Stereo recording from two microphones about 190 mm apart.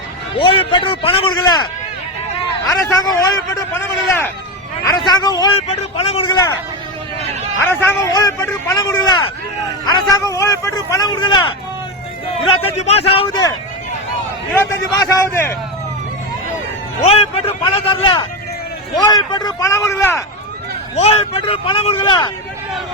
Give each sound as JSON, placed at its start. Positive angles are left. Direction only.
{"t": 0.3, "sound": "a man's voice", "side_deg": 30}
{"t": 2.6, "sound": "a man's voice", "side_deg": 20}
{"t": 5.5, "sound": "a man's voice", "side_deg": 35}
{"t": 7.6, "sound": "a man's voice", "side_deg": 10}
{"t": 12.6, "sound": "a man's voice", "side_deg": 35}
{"t": 14.5, "sound": "a man's voice", "side_deg": 15}
{"t": 17.0, "sound": "a man's voice", "side_deg": 35}
{"t": 19.3, "sound": "a man's voice", "side_deg": 20}
{"t": 20.9, "sound": "a man's voice", "side_deg": 35}